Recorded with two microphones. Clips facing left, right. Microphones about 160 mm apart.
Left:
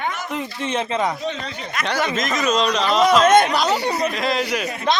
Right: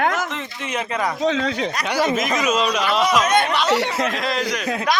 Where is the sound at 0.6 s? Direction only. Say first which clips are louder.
Left 2 dB; 30° left (ahead or behind).